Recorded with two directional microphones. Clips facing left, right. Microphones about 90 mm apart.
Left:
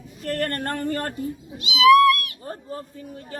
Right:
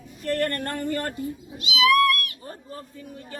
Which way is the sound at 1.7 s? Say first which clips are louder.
Left 6 dB; 25° left (ahead or behind).